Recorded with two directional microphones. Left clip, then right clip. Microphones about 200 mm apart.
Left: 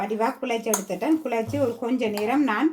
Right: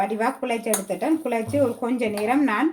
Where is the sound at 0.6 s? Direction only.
20° left (ahead or behind).